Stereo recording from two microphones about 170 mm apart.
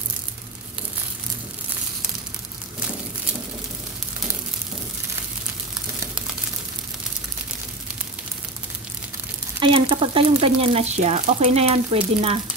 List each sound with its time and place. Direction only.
9.6 s speech: 30° right (ahead or behind)